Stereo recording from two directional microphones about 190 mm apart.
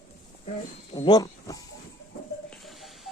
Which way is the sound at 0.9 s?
20° left (ahead or behind).